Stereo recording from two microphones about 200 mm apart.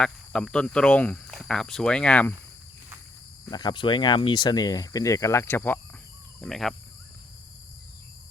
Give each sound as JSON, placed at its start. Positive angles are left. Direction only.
{"t": 0.0, "sound": "speech", "side_deg": 5}
{"t": 3.5, "sound": "speech", "side_deg": 20}